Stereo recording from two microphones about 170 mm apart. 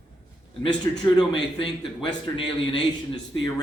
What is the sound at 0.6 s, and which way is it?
A man's voice, 25° left (ahead or behind).